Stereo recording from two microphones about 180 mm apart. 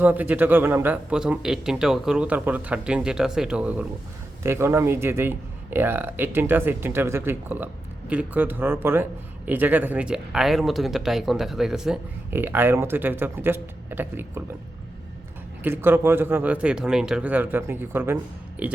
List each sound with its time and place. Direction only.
0.0 s speech: 10° right (ahead or behind)
15.6 s speech: 10° right (ahead or behind)